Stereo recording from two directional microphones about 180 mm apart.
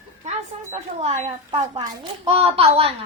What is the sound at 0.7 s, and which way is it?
A woman's voice, 35° right (ahead or behind).